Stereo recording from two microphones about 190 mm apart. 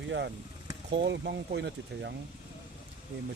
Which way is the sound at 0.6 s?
30° right (ahead or behind).